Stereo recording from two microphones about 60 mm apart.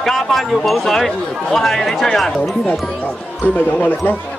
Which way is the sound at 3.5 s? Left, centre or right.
Left.